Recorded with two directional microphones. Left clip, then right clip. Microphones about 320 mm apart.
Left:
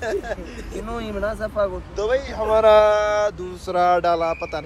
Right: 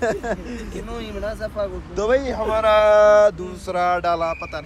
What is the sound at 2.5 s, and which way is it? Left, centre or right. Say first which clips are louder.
Speech: left 3 dB; centre.